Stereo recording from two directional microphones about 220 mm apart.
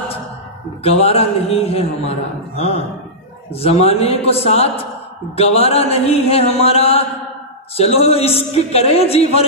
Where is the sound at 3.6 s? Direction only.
30° left (ahead or behind).